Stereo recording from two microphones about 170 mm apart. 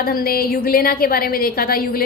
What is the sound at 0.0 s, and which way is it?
A woman's voice, 60° left (ahead or behind).